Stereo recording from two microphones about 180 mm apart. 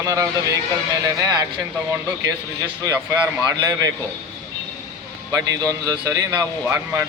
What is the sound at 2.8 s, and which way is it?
Speech, 20° right (ahead or behind).